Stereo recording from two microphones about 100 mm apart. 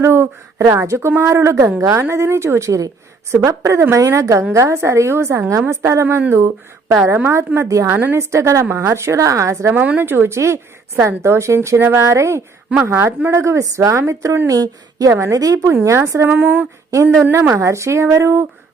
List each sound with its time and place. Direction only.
0.0 s a woman's voice: 25° right (ahead or behind)
7.1 s a woman's voice: 25° right (ahead or behind)
9.8 s a woman's voice: 15° right (ahead or behind)
16.9 s a woman's voice: 30° right (ahead or behind)